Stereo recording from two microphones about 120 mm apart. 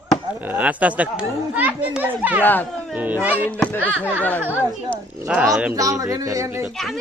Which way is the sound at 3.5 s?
10° left (ahead or behind).